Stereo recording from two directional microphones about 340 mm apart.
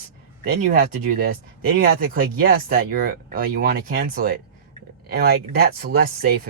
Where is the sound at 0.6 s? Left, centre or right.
Right.